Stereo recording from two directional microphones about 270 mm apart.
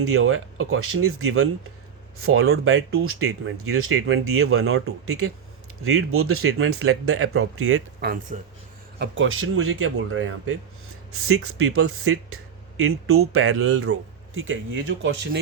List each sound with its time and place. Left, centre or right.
0.0 s speech: right
8.0 s speech: right
9.0 s speech: right